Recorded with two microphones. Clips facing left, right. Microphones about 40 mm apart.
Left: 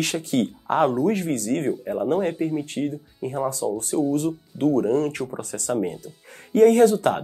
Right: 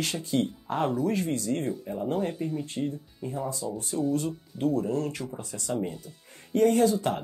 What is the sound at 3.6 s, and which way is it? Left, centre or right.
Speech, left.